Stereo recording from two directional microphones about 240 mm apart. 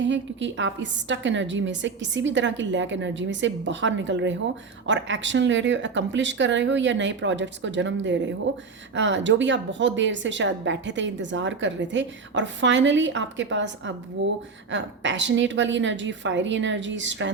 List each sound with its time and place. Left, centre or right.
0.0 s a woman's voice: right